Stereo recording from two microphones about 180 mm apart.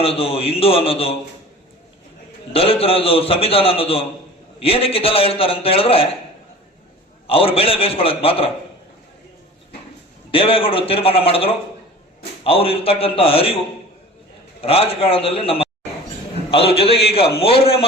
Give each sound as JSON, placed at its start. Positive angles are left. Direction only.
{"t": 0.0, "sound": "a man's voice", "side_deg": 30}
{"t": 2.5, "sound": "a man's voice", "side_deg": 30}
{"t": 7.3, "sound": "a man's voice", "side_deg": 30}
{"t": 10.3, "sound": "a man's voice", "side_deg": 30}
{"t": 14.6, "sound": "a man's voice", "side_deg": 30}
{"t": 16.7, "sound": "a man's voice", "side_deg": 30}